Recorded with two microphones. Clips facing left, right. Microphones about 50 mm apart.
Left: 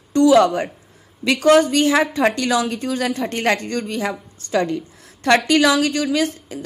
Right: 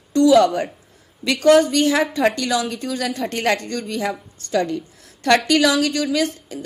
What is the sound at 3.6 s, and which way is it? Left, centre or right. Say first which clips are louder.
Speech: left 2 dB; left.